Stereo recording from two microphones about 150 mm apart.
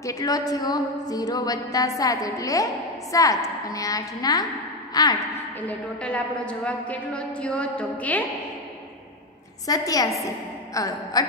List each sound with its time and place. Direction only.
0.0 s a woman's voice: 20° left (ahead or behind)
5.6 s a woman's voice: 10° left (ahead or behind)
9.7 s a woman's voice: 25° left (ahead or behind)